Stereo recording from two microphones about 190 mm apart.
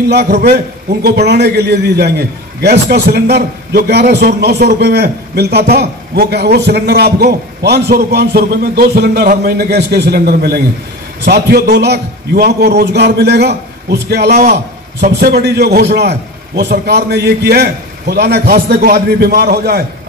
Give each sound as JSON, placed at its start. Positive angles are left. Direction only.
{"t": 0.1, "sound": "a man's voice", "side_deg": -60}